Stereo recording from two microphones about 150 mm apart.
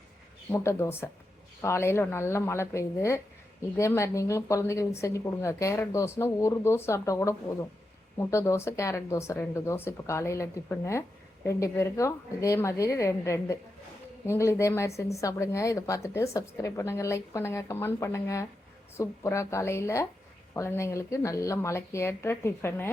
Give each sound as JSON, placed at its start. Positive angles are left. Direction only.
{"t": 0.5, "sound": "a woman's voice", "side_deg": 20}